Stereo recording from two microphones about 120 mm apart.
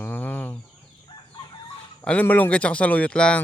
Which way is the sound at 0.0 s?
15° left (ahead or behind).